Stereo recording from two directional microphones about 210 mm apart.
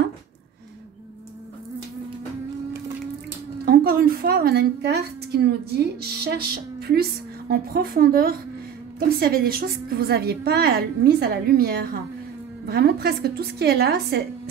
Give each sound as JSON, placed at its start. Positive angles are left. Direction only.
{"t": 3.6, "sound": "a woman's voice", "side_deg": -45}